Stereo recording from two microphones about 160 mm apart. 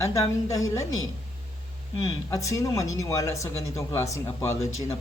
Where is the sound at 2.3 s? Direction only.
20° left (ahead or behind).